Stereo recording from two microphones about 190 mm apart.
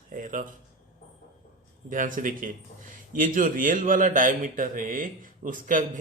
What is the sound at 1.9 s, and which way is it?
A man's voice, 45° right (ahead or behind).